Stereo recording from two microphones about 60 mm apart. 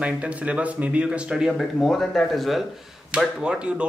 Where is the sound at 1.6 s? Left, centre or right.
Centre.